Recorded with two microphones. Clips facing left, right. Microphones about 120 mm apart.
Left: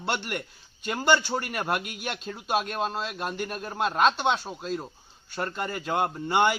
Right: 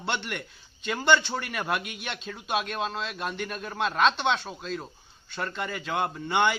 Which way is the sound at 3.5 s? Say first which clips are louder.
Left 1 dB; 5° left (ahead or behind).